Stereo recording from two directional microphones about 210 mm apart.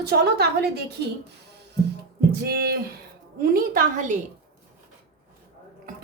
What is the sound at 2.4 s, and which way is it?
A woman's voice, 50° right (ahead or behind).